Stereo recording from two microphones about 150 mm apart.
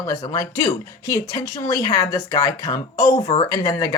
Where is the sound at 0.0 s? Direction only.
20° left (ahead or behind).